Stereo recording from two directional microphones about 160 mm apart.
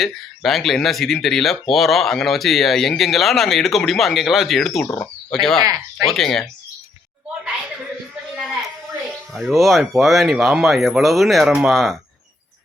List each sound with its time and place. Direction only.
0.0 s speech: centre (ahead or behind)
5.6 s speech: 20° right (ahead or behind)
6.1 s speech: centre (ahead or behind)
8.4 s a sound: 5° right (ahead or behind)
9.3 s speech: centre (ahead or behind)